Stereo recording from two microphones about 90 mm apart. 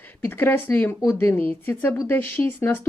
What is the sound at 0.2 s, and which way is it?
Speech, 25° left (ahead or behind).